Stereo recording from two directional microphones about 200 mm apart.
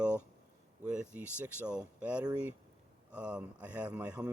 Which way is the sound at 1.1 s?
10° right (ahead or behind).